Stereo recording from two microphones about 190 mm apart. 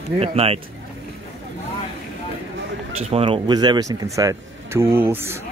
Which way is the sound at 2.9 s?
30° right (ahead or behind).